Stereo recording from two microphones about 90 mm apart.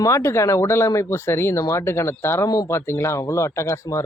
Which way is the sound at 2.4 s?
45° left (ahead or behind).